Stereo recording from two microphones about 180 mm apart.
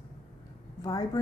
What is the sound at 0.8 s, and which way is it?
Speech, 20° left (ahead or behind).